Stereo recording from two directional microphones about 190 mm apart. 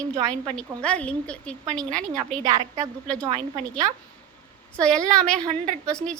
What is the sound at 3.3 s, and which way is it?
Speech, 30° right (ahead or behind).